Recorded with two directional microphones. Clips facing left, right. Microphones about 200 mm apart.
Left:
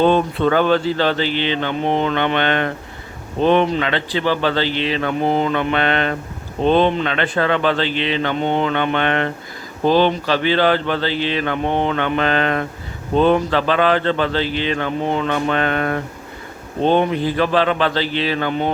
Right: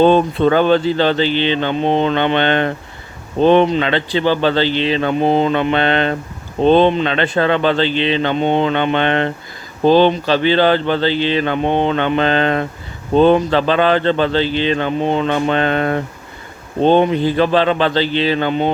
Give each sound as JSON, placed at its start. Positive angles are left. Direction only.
{"t": 0.0, "sound": "speech", "side_deg": -30}